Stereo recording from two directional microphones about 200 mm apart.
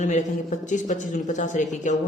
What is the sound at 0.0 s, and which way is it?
A man's voice, 35° left (ahead or behind).